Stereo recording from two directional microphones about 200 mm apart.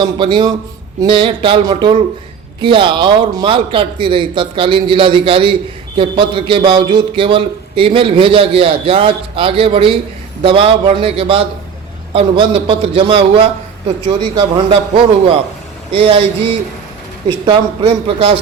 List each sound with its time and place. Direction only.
0.0 s a man's voice: 25° right (ahead or behind)
17.4 s a man's voice: 25° right (ahead or behind)